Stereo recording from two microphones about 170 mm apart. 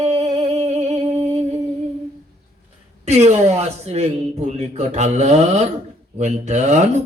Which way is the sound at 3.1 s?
40° right (ahead or behind).